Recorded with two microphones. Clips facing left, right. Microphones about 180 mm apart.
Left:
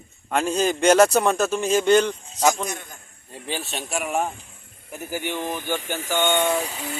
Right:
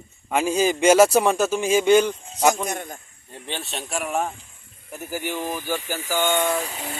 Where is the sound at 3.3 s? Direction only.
5° left (ahead or behind).